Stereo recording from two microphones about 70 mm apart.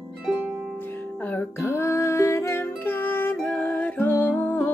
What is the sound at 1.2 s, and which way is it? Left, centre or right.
Music, left.